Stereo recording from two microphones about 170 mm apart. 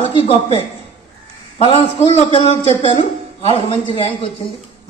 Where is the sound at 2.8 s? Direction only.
35° left (ahead or behind).